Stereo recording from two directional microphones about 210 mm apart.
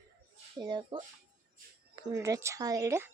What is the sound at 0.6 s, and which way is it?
Speech, 20° right (ahead or behind).